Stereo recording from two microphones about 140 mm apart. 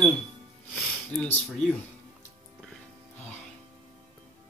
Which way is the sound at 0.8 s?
Centre (ahead or behind).